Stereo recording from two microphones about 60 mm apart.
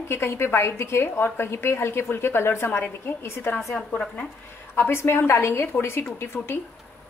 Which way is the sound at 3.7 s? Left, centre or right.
Centre.